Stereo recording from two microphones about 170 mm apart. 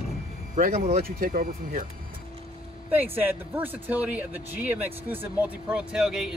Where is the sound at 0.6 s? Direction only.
55° right (ahead or behind).